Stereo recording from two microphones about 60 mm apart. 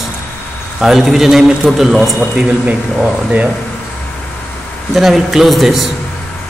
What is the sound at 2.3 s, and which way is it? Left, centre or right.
Speech, right.